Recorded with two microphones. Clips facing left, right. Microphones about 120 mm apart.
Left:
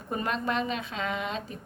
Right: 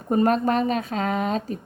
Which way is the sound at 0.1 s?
45° right (ahead or behind).